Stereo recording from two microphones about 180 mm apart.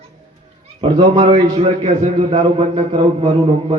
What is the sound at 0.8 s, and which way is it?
A man's voice, 25° right (ahead or behind).